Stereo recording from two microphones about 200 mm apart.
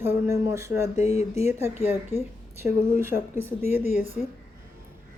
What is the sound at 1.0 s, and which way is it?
Speech, 35° left (ahead or behind).